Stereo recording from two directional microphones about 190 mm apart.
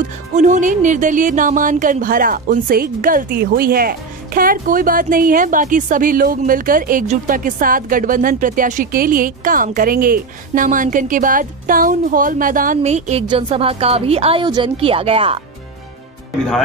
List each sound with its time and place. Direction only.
0.4 s a woman's voice: 40° right (ahead or behind)